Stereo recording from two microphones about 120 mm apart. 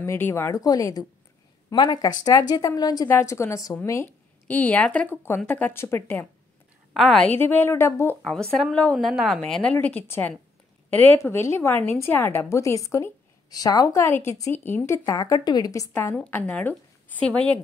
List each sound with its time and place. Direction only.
0.0 s a woman's voice: 20° left (ahead or behind)
4.5 s a woman's voice: 15° left (ahead or behind)
5.4 s a woman's voice: 5° left (ahead or behind)
5.7 s a woman's voice: 20° left (ahead or behind)
6.9 s a woman's voice: centre (ahead or behind)
7.2 s a woman's voice: 15° left (ahead or behind)
9.0 s a woman's voice: centre (ahead or behind)
9.5 s a woman's voice: 10° left (ahead or behind)
15.0 s a woman's voice: 30° left (ahead or behind); by 17.6 s 10° left (ahead or behind)